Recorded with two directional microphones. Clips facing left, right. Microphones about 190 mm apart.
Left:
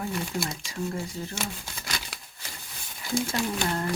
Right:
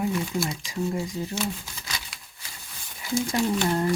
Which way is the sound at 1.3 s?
60° left (ahead or behind).